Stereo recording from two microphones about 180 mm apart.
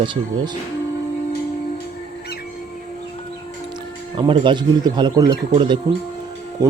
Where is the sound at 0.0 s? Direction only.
25° right (ahead or behind).